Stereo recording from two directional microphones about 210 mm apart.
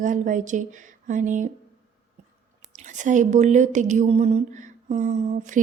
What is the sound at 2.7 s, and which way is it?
A woman's voice, 35° right (ahead or behind).